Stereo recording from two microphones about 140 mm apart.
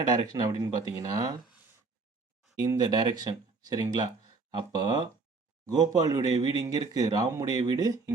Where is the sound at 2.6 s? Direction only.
30° right (ahead or behind).